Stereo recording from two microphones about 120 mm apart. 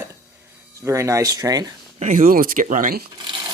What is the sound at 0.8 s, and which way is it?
Speech, 25° right (ahead or behind).